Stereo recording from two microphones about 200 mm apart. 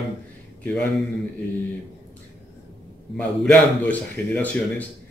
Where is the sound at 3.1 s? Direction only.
5° left (ahead or behind).